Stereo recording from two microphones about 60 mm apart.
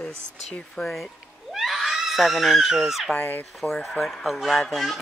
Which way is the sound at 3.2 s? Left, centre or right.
Left.